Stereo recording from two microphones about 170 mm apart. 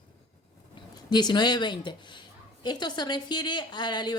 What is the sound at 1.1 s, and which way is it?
A woman's voice, 25° left (ahead or behind).